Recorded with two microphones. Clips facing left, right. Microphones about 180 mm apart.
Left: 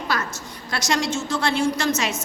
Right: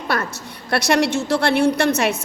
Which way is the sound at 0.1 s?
60° right (ahead or behind).